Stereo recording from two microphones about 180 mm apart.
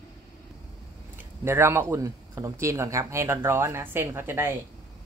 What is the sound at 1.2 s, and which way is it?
Speech, 15° right (ahead or behind).